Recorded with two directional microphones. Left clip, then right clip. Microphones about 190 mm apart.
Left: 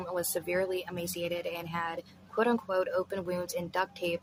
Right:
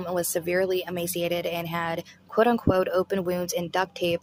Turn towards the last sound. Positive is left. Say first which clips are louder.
# right 6 dB
turn(degrees=-40)  # may be behind; listen again after turning